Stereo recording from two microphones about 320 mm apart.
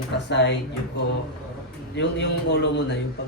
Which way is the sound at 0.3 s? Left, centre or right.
Left.